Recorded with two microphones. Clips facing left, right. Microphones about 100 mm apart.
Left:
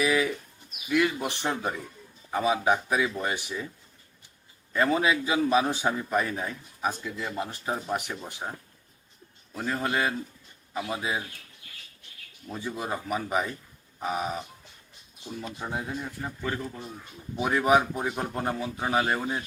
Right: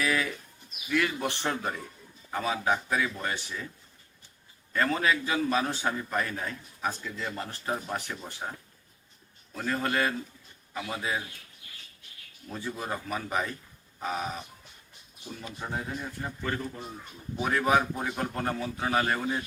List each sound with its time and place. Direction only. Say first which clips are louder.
0.9 s a man's voice: left 3 dB; 15° left (ahead or behind)
4.7 s a man's voice: left 3 dB; 15° left (ahead or behind)
9.6 s a man's voice: left 1 dB; 15° left (ahead or behind)
12.5 s a man's voice: left 2 dB; 15° left (ahead or behind)
15.5 s a man's voice: even; 10° left (ahead or behind)